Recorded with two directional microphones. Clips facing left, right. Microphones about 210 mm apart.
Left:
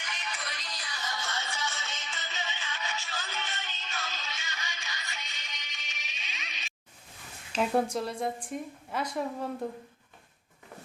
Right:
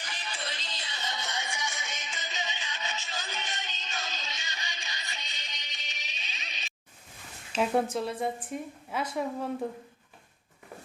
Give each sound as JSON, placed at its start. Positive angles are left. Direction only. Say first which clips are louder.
{"t": 0.0, "sound": "music", "louder": "right 1 dB", "side_deg": -30}
{"t": 5.1, "sound": "music", "louder": "even", "side_deg": -35}
{"t": 7.5, "sound": "a woman's voice", "louder": "even", "side_deg": 0}